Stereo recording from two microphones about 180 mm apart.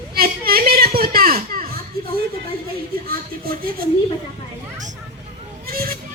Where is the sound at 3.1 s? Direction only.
55° right (ahead or behind).